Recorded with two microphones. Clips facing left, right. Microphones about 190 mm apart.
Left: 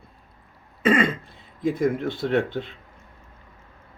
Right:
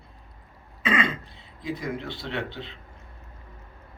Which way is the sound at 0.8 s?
50° left (ahead or behind).